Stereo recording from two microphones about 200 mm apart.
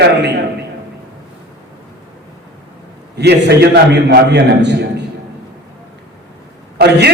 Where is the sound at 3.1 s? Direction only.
55° right (ahead or behind).